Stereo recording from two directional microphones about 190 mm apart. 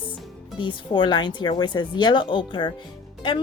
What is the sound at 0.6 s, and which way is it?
Speech, 25° left (ahead or behind).